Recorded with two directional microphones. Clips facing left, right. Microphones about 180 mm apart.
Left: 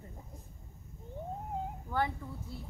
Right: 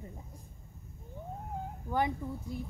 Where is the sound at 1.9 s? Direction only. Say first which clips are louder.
Right 3 dB; 15° right (ahead or behind).